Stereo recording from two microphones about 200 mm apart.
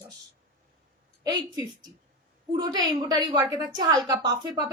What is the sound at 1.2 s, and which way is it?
A woman's voice, 20° right (ahead or behind).